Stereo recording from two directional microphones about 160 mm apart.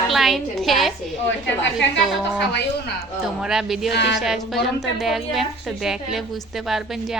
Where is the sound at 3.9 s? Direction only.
90° left.